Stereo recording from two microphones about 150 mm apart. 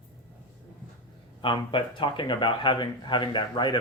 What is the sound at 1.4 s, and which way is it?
Speech, 35° left (ahead or behind).